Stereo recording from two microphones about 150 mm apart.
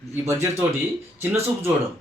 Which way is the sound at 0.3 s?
20° right (ahead or behind).